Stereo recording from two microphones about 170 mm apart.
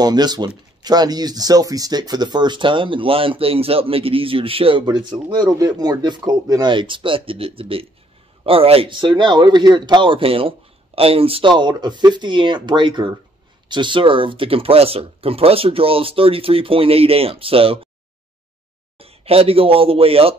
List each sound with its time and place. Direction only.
0.0 s speech: 25° right (ahead or behind)
18.9 s a man's voice: 35° right (ahead or behind)